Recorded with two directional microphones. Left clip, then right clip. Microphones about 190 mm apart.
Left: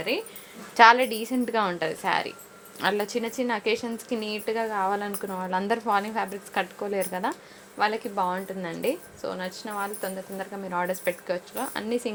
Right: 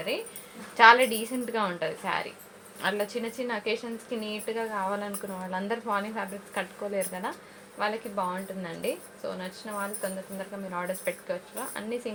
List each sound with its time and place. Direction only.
0.8 s a woman's voice: 60° left (ahead or behind)